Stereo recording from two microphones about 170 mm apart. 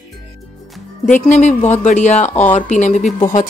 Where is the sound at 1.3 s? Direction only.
45° left (ahead or behind).